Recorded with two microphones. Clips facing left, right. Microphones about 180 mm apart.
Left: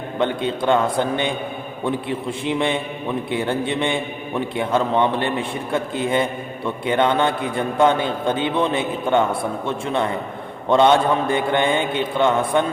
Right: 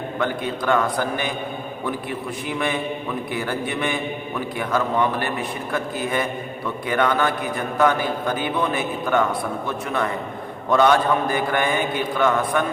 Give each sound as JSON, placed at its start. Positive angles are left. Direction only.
{"t": 0.2, "sound": "a man's voice", "side_deg": 25}